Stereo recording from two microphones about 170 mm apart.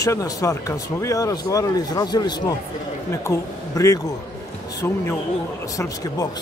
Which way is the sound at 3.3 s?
15° left (ahead or behind).